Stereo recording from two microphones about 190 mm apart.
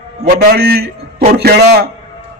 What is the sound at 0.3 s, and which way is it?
A man's voice, 55° right (ahead or behind).